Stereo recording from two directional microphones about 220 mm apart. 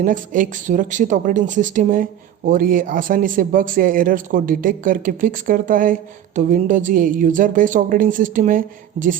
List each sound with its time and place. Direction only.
0.0 s speech: 35° right (ahead or behind)